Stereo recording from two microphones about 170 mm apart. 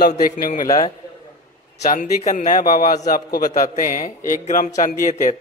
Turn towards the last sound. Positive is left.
turn(degrees=45)  # may be behind; listen again after turning